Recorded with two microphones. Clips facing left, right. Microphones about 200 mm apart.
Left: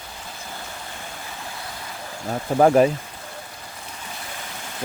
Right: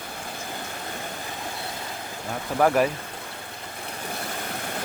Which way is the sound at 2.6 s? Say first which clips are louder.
Left 5 dB; 30° left (ahead or behind).